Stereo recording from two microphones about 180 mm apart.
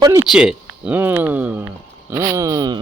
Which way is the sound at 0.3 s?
5° right (ahead or behind).